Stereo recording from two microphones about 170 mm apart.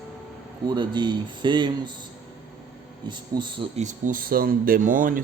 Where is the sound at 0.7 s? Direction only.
25° right (ahead or behind).